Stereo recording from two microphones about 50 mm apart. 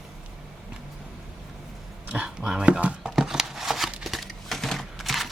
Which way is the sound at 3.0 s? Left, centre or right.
Centre.